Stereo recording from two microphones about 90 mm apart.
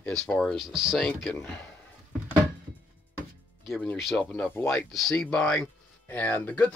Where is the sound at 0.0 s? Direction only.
10° left (ahead or behind).